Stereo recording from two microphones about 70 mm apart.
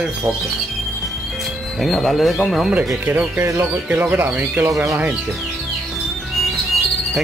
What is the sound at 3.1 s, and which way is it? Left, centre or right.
Speech, right.